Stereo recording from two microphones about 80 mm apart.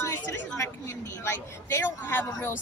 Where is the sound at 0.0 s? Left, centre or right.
Left.